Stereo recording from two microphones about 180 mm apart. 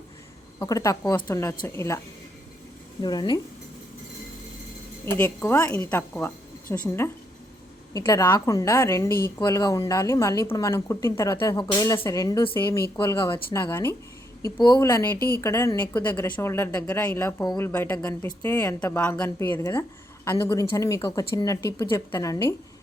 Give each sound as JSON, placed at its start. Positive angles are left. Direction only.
{"t": 0.6, "sound": "a woman's voice", "side_deg": 20}
{"t": 3.0, "sound": "speech", "side_deg": 25}
{"t": 5.0, "sound": "a woman's voice", "side_deg": 15}
{"t": 14.6, "sound": "a woman's voice", "side_deg": 25}